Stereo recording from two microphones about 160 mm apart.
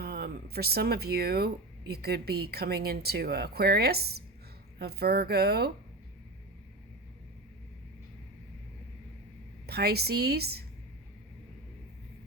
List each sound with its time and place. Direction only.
0.0 s a woman's voice: 75° right (ahead or behind)
9.6 s a woman's voice: 85° right